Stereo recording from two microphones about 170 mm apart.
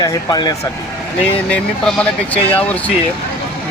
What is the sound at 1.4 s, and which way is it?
Speech, 5° left (ahead or behind).